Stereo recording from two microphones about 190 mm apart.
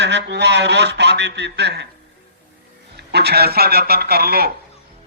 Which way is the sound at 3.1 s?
60° right (ahead or behind).